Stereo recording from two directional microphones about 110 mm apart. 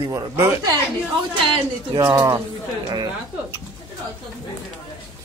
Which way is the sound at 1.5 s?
40° right (ahead or behind).